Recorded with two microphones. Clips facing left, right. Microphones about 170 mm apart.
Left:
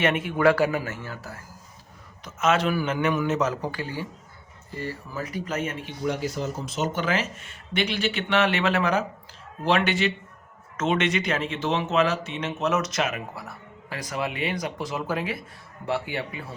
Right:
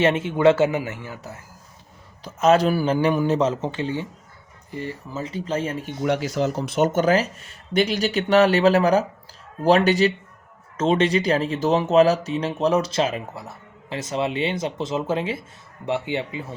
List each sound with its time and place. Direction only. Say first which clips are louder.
0.0 s speech: right 4 dB; 25° right (ahead or behind)
2.2 s speech: right 6 dB; 35° right (ahead or behind)
6.0 s speech: right 6 dB; 80° right; by 16.6 s 20° right (ahead or behind)